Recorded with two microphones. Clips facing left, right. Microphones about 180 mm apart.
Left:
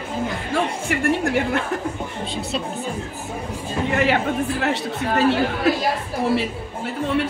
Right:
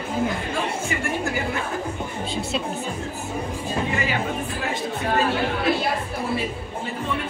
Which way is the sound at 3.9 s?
70° left (ahead or behind).